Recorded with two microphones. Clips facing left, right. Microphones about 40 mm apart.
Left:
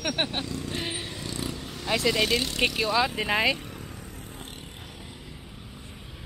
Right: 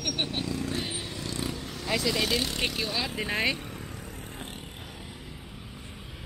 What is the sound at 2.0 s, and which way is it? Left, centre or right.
Speech, centre.